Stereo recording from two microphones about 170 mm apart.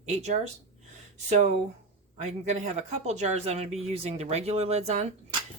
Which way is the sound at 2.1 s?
40° right (ahead or behind).